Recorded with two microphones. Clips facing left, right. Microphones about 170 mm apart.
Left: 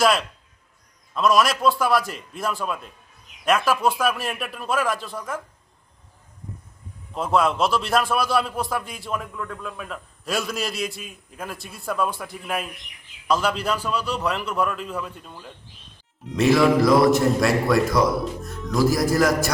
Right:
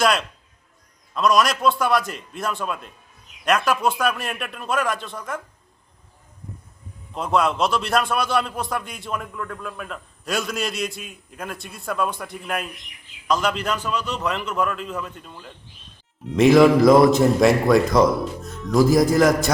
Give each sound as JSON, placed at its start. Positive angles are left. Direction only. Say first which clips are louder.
{"t": 0.0, "sound": "a man's voice", "louder": "left 1 dB", "side_deg": 0}
{"t": 7.1, "sound": "a man's voice", "louder": "even", "side_deg": 5}
{"t": 16.6, "sound": "a man's voice", "louder": "right 4 dB", "side_deg": -20}
{"t": 18.2, "sound": "speech", "louder": "even", "side_deg": 0}
{"t": 19.1, "sound": "a man's voice", "louder": "right 3 dB", "side_deg": -20}